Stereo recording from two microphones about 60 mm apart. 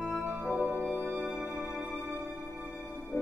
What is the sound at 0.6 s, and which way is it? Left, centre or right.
Music, right.